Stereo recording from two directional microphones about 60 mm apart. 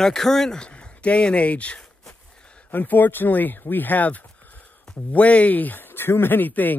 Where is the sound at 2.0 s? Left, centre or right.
Centre.